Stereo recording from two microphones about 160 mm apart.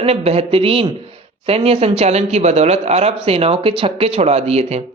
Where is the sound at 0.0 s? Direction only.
40° right (ahead or behind).